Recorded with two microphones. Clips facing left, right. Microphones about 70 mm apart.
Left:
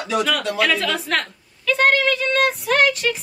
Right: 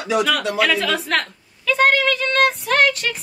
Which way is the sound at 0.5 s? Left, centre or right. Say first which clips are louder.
Right 1 dB; centre.